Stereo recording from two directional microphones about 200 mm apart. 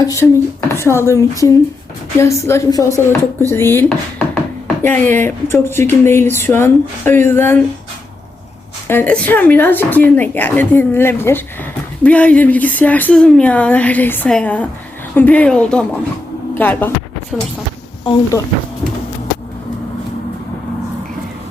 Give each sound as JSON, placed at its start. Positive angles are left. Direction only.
{"t": 0.0, "sound": "speech", "side_deg": 15}
{"t": 8.9, "sound": "speech", "side_deg": 10}
{"t": 18.0, "sound": "speech", "side_deg": 20}